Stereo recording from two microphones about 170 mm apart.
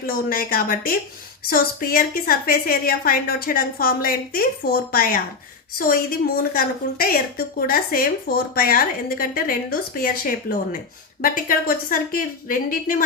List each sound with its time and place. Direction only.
0.0 s a woman's voice: 60° left (ahead or behind)